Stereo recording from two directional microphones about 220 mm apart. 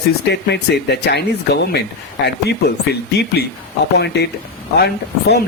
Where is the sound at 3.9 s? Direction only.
50° left (ahead or behind).